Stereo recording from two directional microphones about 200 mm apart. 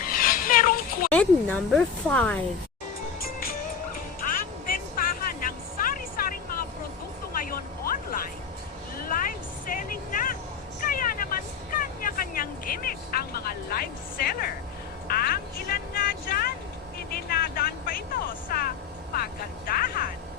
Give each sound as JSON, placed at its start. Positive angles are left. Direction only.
{"t": 0.0, "sound": "a sound", "side_deg": 45}
{"t": 1.1, "sound": "speech", "side_deg": 5}
{"t": 3.2, "sound": "music", "side_deg": 45}
{"t": 7.3, "sound": "vehicle", "side_deg": 45}
{"t": 15.0, "sound": "music", "side_deg": 50}
{"t": 17.2, "sound": "vehicle", "side_deg": 50}